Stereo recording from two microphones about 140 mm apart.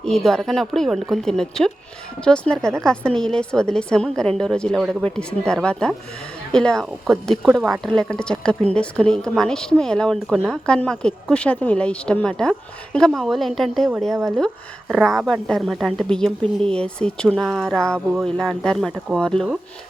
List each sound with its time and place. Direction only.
0.3 s a woman's voice: centre (ahead or behind)